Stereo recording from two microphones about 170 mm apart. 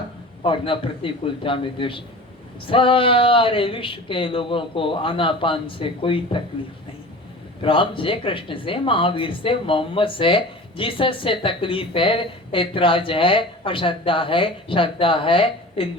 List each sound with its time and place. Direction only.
0.4 s speech: 30° left (ahead or behind)
7.6 s speech: 30° left (ahead or behind)